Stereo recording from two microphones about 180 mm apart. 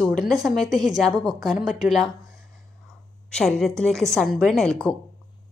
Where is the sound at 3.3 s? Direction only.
5° left (ahead or behind).